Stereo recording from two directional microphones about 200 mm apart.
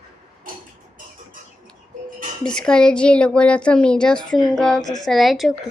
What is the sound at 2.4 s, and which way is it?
Speech, 5° left (ahead or behind).